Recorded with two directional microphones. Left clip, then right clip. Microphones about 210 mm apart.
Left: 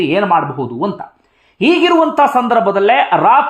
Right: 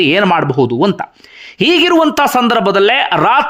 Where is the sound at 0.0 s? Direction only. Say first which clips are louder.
Right 2 dB; 25° right (ahead or behind).